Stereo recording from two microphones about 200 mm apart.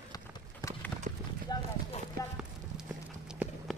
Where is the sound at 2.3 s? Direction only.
5° right (ahead or behind).